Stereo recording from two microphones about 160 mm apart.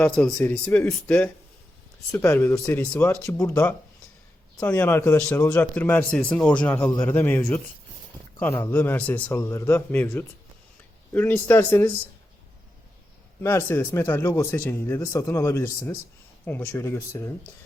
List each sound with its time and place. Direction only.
0.0 s speech: 5° left (ahead or behind)
3.3 s speech: 20° left (ahead or behind)
13.4 s speech: 15° left (ahead or behind)